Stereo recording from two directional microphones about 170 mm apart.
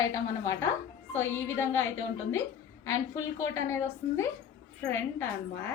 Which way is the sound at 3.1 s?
15° left (ahead or behind).